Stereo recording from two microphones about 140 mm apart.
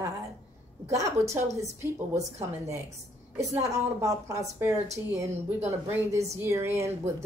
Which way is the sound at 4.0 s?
25° right (ahead or behind).